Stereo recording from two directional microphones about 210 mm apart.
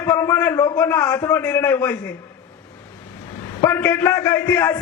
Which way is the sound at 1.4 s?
5° left (ahead or behind).